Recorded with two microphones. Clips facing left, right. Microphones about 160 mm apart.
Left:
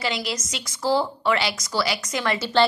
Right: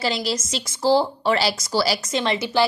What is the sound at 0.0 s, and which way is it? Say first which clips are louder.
A woman's voice: right 3 dB; 35° right (ahead or behind).